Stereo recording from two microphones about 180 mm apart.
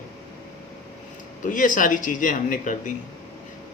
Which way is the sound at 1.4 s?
45° left (ahead or behind).